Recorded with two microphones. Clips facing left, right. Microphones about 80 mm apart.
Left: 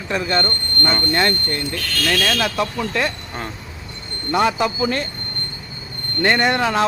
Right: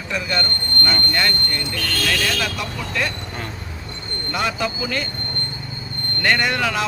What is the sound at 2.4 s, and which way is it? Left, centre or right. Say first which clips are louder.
Speech: left 5 dB; left.